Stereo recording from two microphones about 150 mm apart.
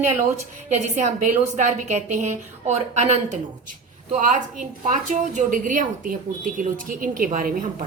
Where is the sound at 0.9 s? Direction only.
55° right (ahead or behind).